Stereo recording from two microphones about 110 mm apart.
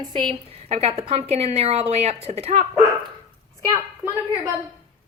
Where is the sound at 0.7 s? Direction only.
70° right (ahead or behind).